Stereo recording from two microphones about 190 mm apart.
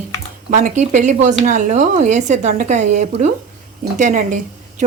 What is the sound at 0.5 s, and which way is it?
A woman's voice, 40° right (ahead or behind).